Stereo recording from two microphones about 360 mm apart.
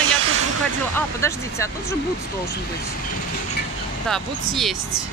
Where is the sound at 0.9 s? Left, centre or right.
Centre.